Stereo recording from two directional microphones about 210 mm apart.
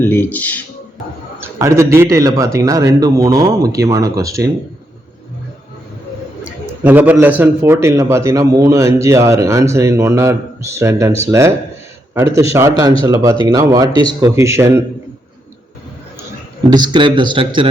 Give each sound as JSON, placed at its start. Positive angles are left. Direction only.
{"t": 0.0, "sound": "speech", "side_deg": 10}
{"t": 1.4, "sound": "a man's voice", "side_deg": -15}
{"t": 6.4, "sound": "a man's voice", "side_deg": -5}
{"t": 16.6, "sound": "a man's voice", "side_deg": -20}